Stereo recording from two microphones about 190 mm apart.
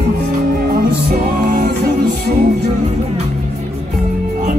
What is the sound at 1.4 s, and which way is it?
Music, 55° right (ahead or behind).